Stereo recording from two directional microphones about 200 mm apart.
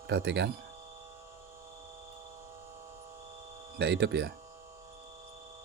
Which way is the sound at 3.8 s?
55° right (ahead or behind).